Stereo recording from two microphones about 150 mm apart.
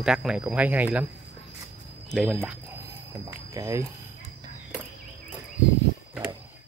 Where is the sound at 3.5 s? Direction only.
20° right (ahead or behind).